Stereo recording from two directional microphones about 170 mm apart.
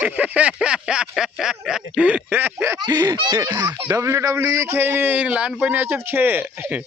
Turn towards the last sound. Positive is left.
turn(degrees=-10)  # may be behind; listen again after turning